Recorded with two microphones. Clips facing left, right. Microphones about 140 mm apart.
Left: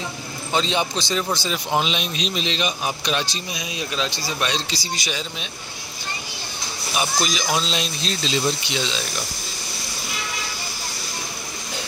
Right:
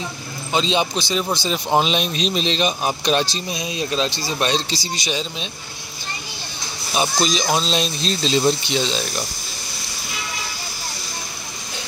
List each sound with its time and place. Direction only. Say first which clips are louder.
0.5 s a man's voice: right 2 dB; 20° right (ahead or behind)
1.5 s speech: right 6 dB; 35° right (ahead or behind)
7.0 s speech: right 4 dB; 25° right (ahead or behind)